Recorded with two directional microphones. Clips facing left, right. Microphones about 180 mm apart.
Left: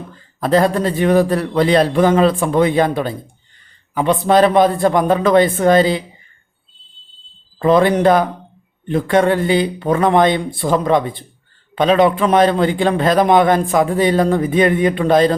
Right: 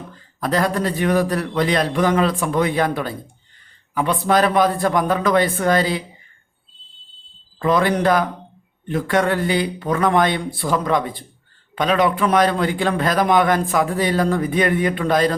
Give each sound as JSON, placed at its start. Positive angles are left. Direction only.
{"t": 0.3, "sound": "a man's voice", "side_deg": 30}
{"t": 7.6, "sound": "a man's voice", "side_deg": 25}